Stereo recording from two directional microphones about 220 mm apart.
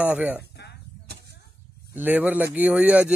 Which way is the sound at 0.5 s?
50° left (ahead or behind).